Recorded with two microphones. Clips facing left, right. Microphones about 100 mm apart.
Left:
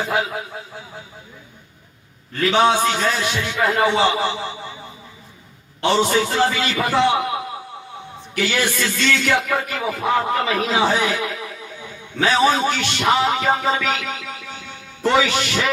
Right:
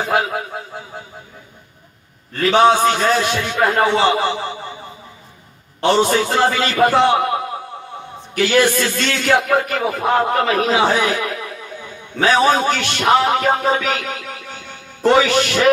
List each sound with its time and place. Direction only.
0.0 s a man's voice: 50° right (ahead or behind)
2.3 s a man's voice: 45° right (ahead or behind)
5.8 s a man's voice: 50° right (ahead or behind)